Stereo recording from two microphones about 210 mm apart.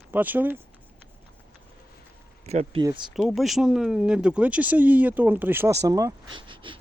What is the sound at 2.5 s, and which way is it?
Speech, 30° right (ahead or behind).